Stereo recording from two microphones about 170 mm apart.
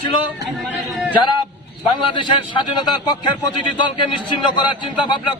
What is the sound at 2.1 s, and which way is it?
Speech, 25° left (ahead or behind).